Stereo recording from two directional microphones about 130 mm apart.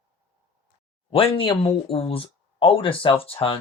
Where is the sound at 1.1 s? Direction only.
45° left (ahead or behind).